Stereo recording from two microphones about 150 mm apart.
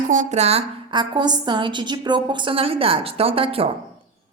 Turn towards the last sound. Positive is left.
turn(degrees=-40)  # may be behind; listen again after turning